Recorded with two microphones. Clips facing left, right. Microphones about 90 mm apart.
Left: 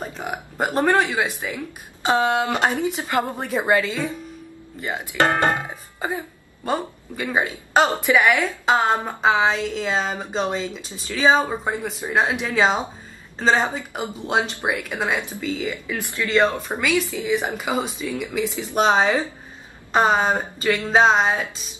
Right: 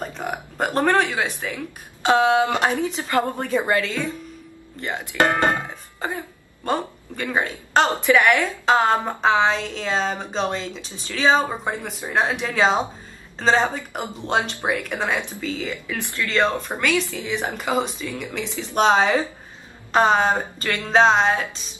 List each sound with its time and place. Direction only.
0.0 s burping: 5° left (ahead or behind)
1.0 s speech: 10° left (ahead or behind)
2.5 s speech: 20° left (ahead or behind)